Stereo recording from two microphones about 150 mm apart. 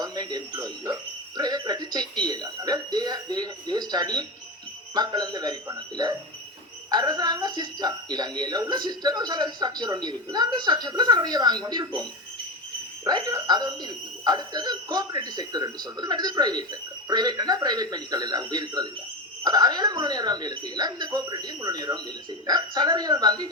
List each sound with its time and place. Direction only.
0.0 s speech: 25° right (ahead or behind)
13.1 s speech: 25° right (ahead or behind)